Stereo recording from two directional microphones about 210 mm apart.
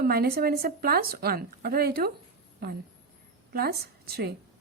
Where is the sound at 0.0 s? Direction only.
45° right (ahead or behind).